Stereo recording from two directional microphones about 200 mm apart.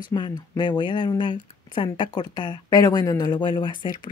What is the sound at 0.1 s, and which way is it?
Speech, 20° left (ahead or behind).